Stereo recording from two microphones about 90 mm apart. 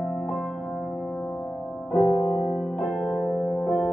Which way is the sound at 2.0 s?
10° right (ahead or behind).